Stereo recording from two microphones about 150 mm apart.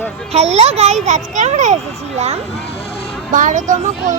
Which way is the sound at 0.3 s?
45° right (ahead or behind).